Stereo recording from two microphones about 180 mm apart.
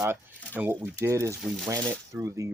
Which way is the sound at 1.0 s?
15° right (ahead or behind).